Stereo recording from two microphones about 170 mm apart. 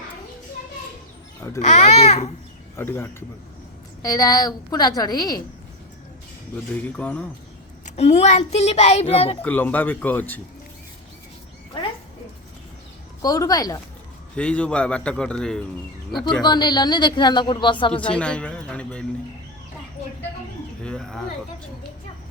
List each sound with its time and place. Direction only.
1.4 s speech: 20° left (ahead or behind)
1.6 s a child's voice: 40° left (ahead or behind)
2.7 s a man's voice: 15° left (ahead or behind)
6.8 s a man's voice: 10° left (ahead or behind)
7.9 s a child's voice: 40° left (ahead or behind)
9.4 s a man's voice: 10° left (ahead or behind)
13.2 s speech: 20° left (ahead or behind)
14.3 s a man's voice: 5° left (ahead or behind)
16.4 s speech: 25° left (ahead or behind)
18.1 s a man's voice: 5° left (ahead or behind)
20.8 s speech: 5° left (ahead or behind)